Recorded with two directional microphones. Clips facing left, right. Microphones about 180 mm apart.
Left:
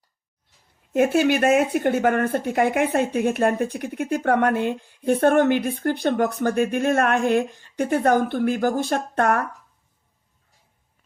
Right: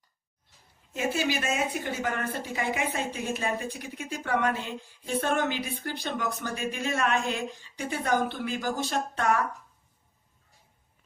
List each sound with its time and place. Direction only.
0.9 s speech: 60° left (ahead or behind)